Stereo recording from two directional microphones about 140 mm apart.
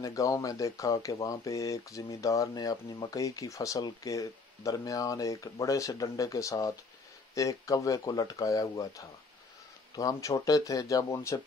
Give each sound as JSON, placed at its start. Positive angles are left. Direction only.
{"t": 0.0, "sound": "speech", "side_deg": 25}